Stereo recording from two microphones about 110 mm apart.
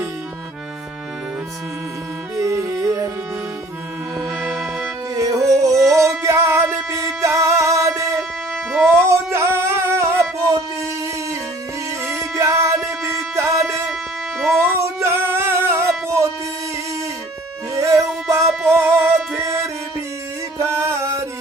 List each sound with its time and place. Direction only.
2.4 s music: 30° right (ahead or behind)
4.4 s music: 5° left (ahead or behind)
5.1 s music: 30° right (ahead or behind)
12.0 s music: 25° right (ahead or behind)
14.3 s music: centre (ahead or behind)
14.6 s music: 20° right (ahead or behind)
17.7 s music: 30° right (ahead or behind)